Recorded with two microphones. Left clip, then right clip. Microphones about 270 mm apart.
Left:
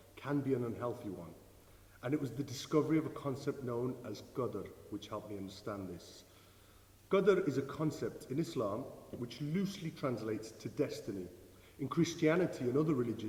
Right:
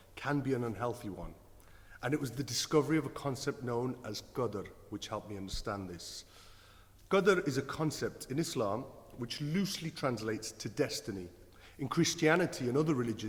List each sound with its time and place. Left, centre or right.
0.2 s a man's voice: right